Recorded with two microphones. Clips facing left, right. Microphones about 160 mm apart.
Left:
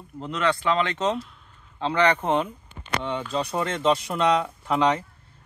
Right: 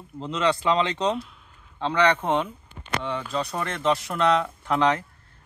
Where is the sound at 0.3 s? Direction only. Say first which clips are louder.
Right 1 dB; 20° right (ahead or behind).